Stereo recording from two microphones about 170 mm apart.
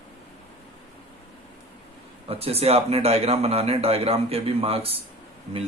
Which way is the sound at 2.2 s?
35° right (ahead or behind).